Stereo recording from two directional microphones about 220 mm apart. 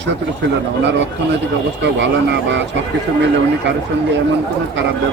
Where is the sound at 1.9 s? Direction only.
55° right (ahead or behind).